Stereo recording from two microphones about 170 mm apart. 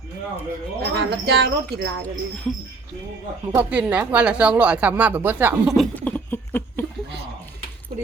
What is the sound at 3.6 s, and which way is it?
Speech, 10° right (ahead or behind).